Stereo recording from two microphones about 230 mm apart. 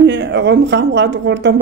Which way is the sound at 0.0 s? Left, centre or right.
Right.